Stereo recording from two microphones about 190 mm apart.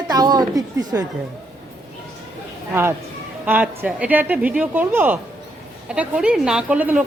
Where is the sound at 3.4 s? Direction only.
10° right (ahead or behind).